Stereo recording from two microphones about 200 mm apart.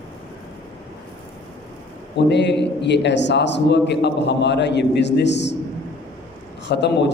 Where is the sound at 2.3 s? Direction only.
60° left (ahead or behind).